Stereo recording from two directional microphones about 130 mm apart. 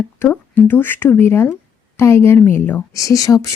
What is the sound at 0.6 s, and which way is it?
Speech, 15° left (ahead or behind).